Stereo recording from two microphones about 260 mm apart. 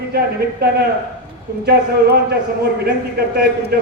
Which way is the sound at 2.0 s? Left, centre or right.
Right.